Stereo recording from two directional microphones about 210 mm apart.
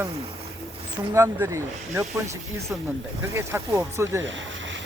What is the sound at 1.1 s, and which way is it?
Speech, 15° right (ahead or behind).